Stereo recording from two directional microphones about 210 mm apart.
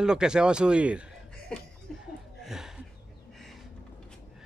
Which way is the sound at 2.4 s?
Centre (ahead or behind).